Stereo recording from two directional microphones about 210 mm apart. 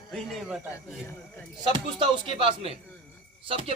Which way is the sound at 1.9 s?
25° right (ahead or behind).